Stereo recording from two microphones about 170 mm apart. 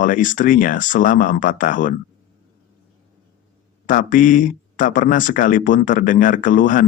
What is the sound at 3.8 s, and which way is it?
Speech, 50° left (ahead or behind).